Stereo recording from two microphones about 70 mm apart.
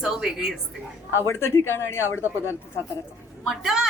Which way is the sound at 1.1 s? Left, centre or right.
Left.